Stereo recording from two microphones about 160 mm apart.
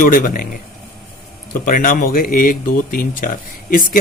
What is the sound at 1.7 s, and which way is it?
A man's voice, 60° left (ahead or behind).